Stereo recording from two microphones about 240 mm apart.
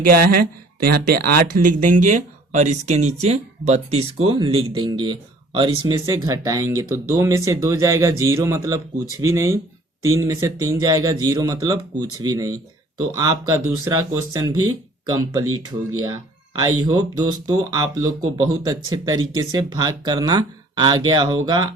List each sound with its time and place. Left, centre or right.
0.0 s speech: right; by 15.4 s centre
15.4 s speech: right
16.6 s speech: centre